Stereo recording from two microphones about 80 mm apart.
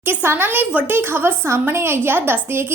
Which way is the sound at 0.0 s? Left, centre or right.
Right.